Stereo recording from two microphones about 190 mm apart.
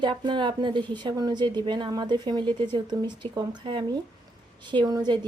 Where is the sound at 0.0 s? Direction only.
25° right (ahead or behind).